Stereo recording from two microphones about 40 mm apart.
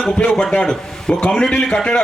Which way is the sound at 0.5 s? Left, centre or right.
Left.